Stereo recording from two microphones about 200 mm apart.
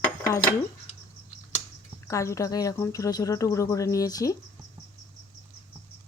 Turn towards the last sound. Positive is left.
turn(degrees=15)  # may be behind; listen again after turning